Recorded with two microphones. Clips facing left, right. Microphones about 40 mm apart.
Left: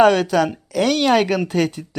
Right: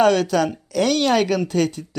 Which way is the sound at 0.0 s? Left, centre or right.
Centre.